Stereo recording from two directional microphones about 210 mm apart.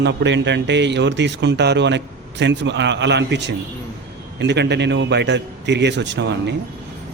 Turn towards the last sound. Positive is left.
turn(degrees=-55)  # may be behind; listen again after turning